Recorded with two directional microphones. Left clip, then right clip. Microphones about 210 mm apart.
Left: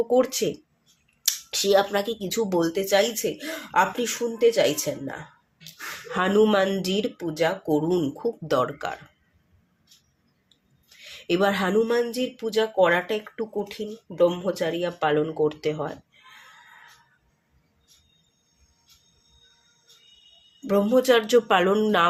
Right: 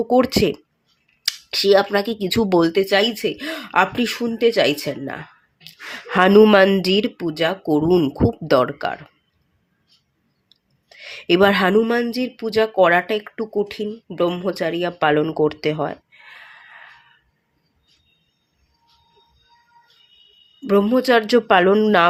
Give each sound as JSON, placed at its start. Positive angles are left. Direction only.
{"t": 0.1, "sound": "speech", "side_deg": -35}
{"t": 10.5, "sound": "speech", "side_deg": -25}
{"t": 20.7, "sound": "speech", "side_deg": -30}